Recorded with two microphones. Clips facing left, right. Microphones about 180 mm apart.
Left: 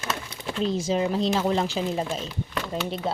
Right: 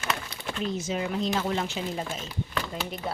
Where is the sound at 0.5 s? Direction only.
30° left (ahead or behind).